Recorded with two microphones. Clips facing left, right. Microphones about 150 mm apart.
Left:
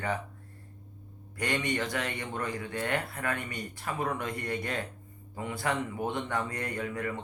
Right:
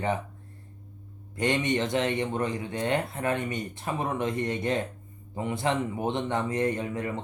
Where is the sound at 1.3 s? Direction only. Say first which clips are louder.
Right 5 dB; 20° right (ahead or behind).